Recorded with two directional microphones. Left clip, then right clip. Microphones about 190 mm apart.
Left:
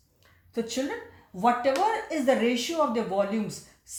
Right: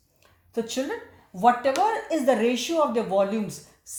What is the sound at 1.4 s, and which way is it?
Speech, 35° right (ahead or behind).